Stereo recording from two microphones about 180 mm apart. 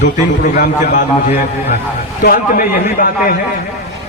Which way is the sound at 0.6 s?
45° left (ahead or behind).